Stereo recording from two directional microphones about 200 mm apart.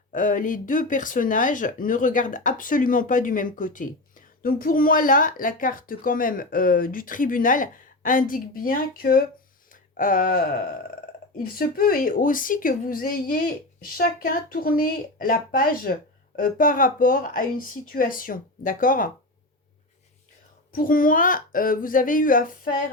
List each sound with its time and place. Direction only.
0.1 s speech: 40° left (ahead or behind)
11.5 s speech: 45° left (ahead or behind)
20.7 s speech: 45° left (ahead or behind)